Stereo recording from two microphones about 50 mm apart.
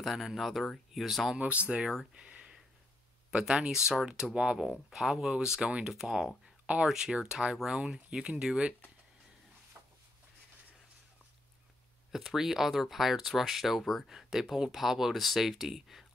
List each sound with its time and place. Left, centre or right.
0.0 s speech: centre
1.3 s speech: right
1.8 s speech: centre
2.2 s a sound: right
3.3 s speech: centre
12.1 s speech: centre